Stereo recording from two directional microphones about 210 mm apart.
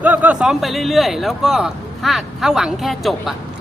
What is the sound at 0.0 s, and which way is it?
Speech, 10° right (ahead or behind).